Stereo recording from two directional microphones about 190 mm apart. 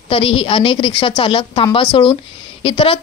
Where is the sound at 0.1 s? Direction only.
30° left (ahead or behind).